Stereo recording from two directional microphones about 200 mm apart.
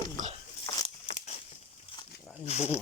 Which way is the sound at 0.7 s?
20° left (ahead or behind).